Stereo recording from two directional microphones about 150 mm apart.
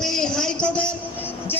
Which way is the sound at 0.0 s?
5° left (ahead or behind).